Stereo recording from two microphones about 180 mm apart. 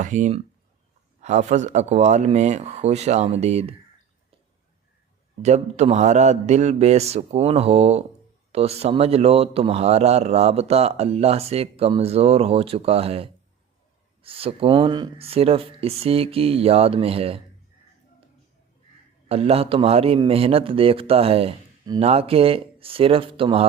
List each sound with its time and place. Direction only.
0.0 s speech: 45° right (ahead or behind)
5.4 s speech: 40° right (ahead or behind)
19.3 s speech: 35° right (ahead or behind)